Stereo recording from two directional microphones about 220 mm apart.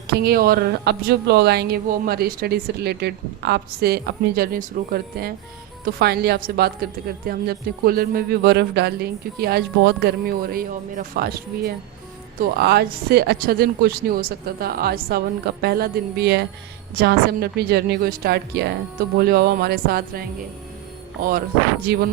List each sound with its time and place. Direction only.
0.1 s speech: 45° right (ahead or behind)
21.9 s speech: 45° right (ahead or behind)